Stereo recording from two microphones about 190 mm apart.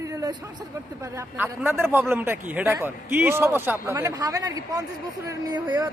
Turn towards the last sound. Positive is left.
turn(degrees=-20)  # may be behind; listen again after turning